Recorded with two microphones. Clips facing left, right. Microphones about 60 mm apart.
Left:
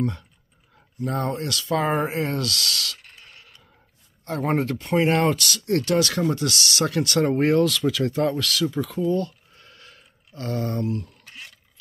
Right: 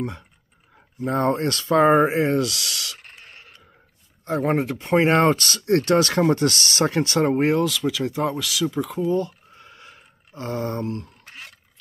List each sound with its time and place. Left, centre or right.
1.0 s speech: right; by 3.0 s centre
3.2 s a sound: right
4.3 s speech: centre
4.7 s speech: right
7.2 s speech: centre
8.8 s a sound: centre; by 11.5 s right